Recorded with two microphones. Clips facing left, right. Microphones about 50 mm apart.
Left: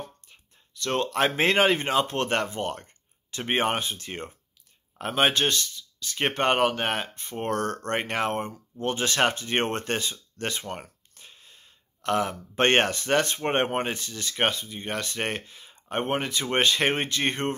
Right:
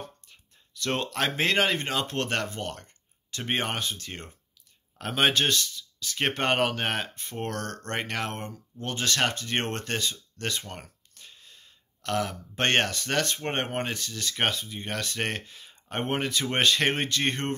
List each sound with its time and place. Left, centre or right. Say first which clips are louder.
0.7 s speech: left 3 dB; centre
1.1 s speech: left 4 dB; centre
5.1 s speech: left 1 dB; centre
7.4 s speech: left 7 dB; centre